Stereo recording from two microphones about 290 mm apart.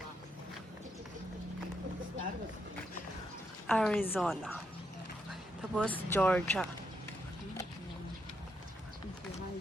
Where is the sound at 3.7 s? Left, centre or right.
Centre.